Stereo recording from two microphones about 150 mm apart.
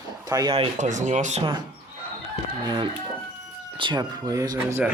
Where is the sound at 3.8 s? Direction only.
25° right (ahead or behind).